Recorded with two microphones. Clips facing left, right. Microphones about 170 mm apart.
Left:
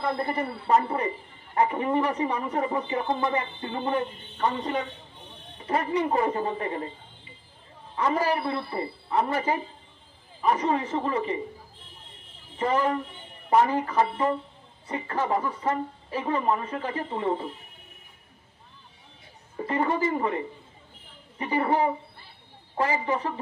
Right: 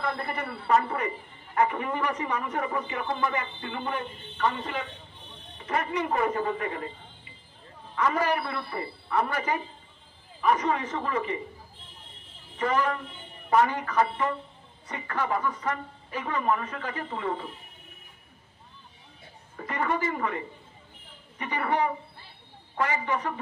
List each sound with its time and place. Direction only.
0.0 s a man's voice: 30° left (ahead or behind)
7.9 s a man's voice: 30° left (ahead or behind)
12.5 s a man's voice: 30° left (ahead or behind)
19.5 s a man's voice: 30° left (ahead or behind)